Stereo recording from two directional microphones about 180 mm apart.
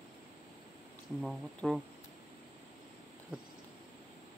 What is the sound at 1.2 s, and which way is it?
Speech, centre (ahead or behind).